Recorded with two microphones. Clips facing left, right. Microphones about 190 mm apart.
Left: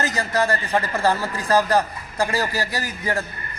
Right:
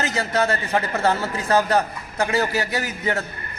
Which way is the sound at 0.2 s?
5° right (ahead or behind).